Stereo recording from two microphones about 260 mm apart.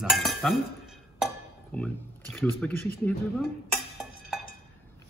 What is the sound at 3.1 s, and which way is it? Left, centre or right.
Dishes, centre.